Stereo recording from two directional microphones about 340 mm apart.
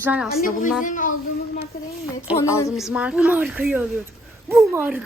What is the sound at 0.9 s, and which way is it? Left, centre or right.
Speech, left.